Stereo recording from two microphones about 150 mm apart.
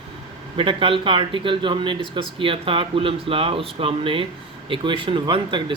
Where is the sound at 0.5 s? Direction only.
35° right (ahead or behind).